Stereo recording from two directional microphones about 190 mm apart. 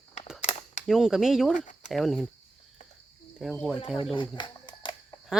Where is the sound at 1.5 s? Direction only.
40° left (ahead or behind).